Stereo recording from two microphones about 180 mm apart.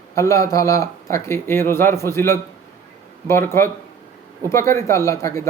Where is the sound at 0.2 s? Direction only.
15° left (ahead or behind).